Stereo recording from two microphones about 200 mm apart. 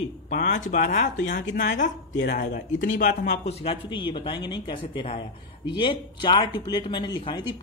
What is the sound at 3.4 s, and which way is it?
Speech, 30° left (ahead or behind).